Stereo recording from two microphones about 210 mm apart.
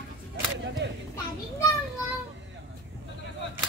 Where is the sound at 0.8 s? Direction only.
55° right (ahead or behind).